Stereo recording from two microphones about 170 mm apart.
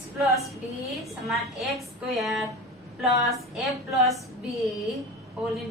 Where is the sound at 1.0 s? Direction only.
Centre (ahead or behind).